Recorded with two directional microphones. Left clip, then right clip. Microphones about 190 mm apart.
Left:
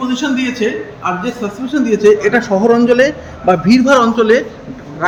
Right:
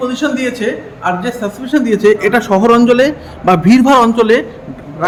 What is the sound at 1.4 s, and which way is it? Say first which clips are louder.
A man's voice: right 4 dB; 40° right (ahead or behind).